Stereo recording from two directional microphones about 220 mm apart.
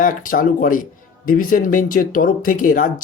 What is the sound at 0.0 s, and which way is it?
Speech, 40° left (ahead or behind).